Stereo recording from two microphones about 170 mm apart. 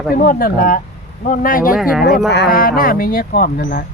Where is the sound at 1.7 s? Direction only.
5° right (ahead or behind).